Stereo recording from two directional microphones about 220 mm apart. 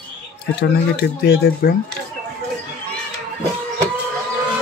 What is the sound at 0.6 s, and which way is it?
Speech, 50° left (ahead or behind).